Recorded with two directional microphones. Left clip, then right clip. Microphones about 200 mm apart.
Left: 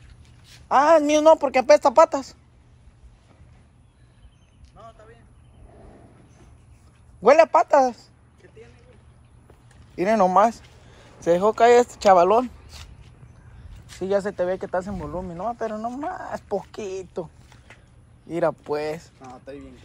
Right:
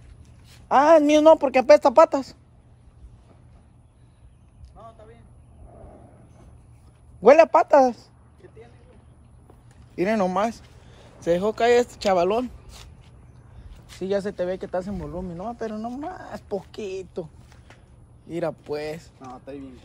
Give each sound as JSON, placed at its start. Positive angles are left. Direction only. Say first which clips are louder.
{"t": 0.7, "sound": "a woman's voice", "louder": "right 1 dB", "side_deg": -20}
{"t": 7.2, "sound": "a man's voice", "louder": "right 1 dB", "side_deg": -20}
{"t": 9.9, "sound": "speech", "louder": "left 5 dB", "side_deg": 0}
{"t": 12.7, "sound": "walk", "louder": "left 2 dB", "side_deg": -15}
{"t": 13.8, "sound": "speech", "louder": "left 2 dB", "side_deg": 5}
{"t": 17.1, "sound": "a sound", "louder": "left 2 dB", "side_deg": 10}
{"t": 18.2, "sound": "speech", "louder": "left 5 dB", "side_deg": 15}
{"t": 19.1, "sound": "a man's voice", "louder": "right 1 dB", "side_deg": -15}